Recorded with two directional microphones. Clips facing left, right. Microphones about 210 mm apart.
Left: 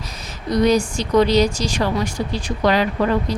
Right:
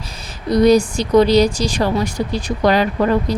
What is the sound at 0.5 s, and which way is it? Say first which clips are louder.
Speech: right 4 dB; 35° right (ahead or behind).